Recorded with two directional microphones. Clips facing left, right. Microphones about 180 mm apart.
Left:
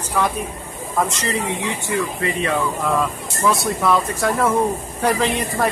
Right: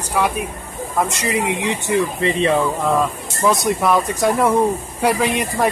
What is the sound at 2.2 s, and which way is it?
Speech, 25° right (ahead or behind).